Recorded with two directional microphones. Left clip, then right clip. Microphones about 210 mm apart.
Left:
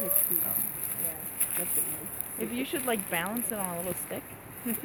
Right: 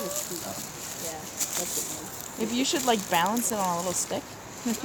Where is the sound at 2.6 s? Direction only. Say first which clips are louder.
Right 7 dB; 55° right (ahead or behind).